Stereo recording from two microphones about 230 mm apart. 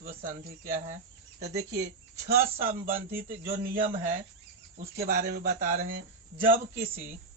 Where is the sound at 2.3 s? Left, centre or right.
Centre.